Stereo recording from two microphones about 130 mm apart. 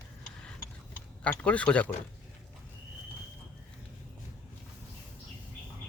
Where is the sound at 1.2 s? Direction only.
10° left (ahead or behind).